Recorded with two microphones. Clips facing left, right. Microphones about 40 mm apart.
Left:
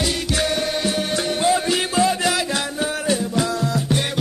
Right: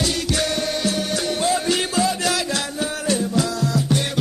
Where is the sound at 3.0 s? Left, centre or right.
Left.